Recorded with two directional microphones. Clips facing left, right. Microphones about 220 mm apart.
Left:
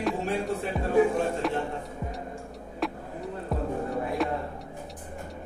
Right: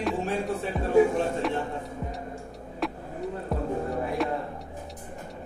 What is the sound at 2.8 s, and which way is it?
Vehicle, centre (ahead or behind).